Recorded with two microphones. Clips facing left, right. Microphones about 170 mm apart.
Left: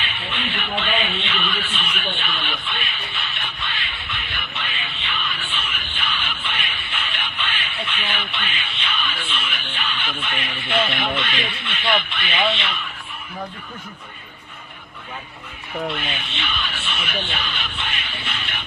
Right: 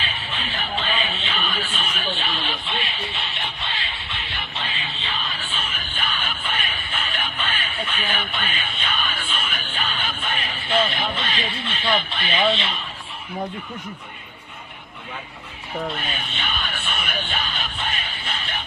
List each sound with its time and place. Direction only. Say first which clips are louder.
0.0 s a sound: left 2 dB; 40° right (ahead or behind)
3.4 s music: right 1 dB; 35° right (ahead or behind)
15.9 s speech: left 1 dB; 40° right (ahead or behind)